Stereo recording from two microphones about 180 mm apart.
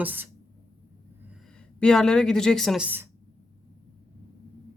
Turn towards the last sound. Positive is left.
turn(degrees=-10)  # may be behind; listen again after turning